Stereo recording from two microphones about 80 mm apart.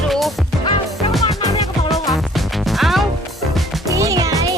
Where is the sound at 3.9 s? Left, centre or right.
Right.